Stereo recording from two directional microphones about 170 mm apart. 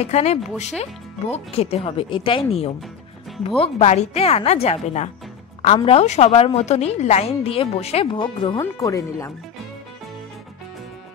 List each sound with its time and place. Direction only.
0.0 s a woman's voice: 40° left (ahead or behind)
8.5 s speech: 15° left (ahead or behind)